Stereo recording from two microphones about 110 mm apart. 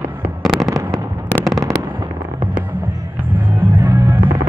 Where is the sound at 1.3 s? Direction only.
20° left (ahead or behind).